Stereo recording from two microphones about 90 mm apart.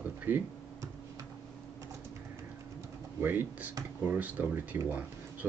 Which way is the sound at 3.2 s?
20° right (ahead or behind).